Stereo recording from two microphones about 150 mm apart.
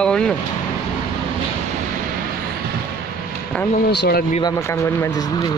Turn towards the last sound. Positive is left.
turn(degrees=90)